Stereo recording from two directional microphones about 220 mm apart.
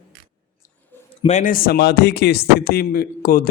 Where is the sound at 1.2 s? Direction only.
30° left (ahead or behind).